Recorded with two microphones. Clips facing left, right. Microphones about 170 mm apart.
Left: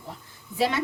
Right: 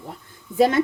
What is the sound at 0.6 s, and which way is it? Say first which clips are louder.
Speech: right 8 dB; 50° right (ahead or behind).